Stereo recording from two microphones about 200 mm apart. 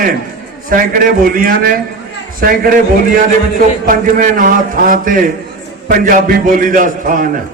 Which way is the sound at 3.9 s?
45° right (ahead or behind).